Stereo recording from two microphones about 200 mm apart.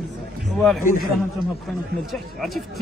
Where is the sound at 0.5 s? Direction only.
Centre (ahead or behind).